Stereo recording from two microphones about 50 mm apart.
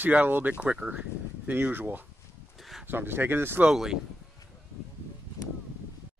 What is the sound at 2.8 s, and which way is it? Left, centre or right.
Speech, right.